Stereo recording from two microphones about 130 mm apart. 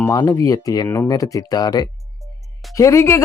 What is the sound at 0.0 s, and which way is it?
Speech, 25° left (ahead or behind).